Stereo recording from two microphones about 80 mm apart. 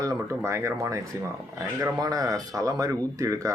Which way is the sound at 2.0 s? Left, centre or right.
Right.